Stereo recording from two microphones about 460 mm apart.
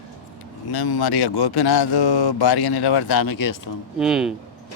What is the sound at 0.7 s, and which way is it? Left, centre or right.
Speech, left.